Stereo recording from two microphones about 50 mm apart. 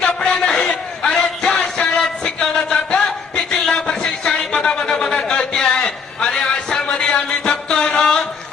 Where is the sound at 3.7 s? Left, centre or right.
Centre.